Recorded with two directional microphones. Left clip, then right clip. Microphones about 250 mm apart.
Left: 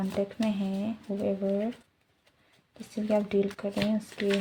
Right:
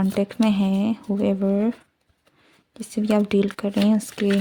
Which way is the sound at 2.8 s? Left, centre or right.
Right.